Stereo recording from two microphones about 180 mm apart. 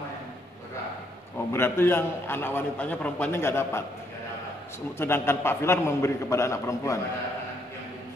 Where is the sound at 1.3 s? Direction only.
15° left (ahead or behind).